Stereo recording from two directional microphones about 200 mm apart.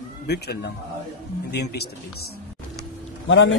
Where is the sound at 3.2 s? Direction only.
65° left (ahead or behind).